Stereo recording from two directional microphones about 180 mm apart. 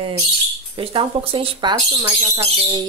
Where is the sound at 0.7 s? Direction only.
30° right (ahead or behind).